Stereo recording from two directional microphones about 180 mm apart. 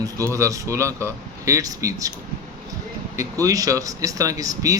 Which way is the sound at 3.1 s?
20° right (ahead or behind).